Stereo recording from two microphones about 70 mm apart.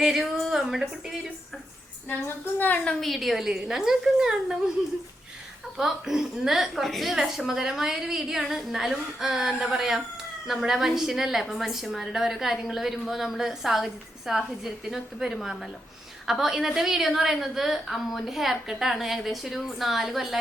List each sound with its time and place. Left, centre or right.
0.0 s speech: centre
2.0 s a woman's voice: left
3.0 s a woman's voice: centre
5.7 s a woman's voice: centre